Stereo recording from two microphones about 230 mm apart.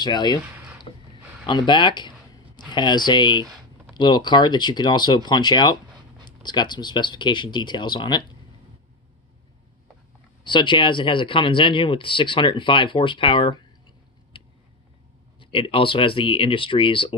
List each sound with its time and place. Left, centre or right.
0.0 s speech: centre
0.9 s a sound: left
1.4 s speech: centre
10.4 s speech: left
15.3 s speech: left